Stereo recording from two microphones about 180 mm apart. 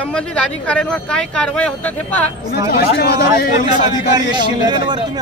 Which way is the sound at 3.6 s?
25° right (ahead or behind).